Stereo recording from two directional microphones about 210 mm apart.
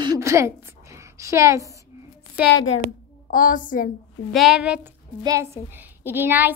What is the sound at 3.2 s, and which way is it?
Speech, 40° left (ahead or behind).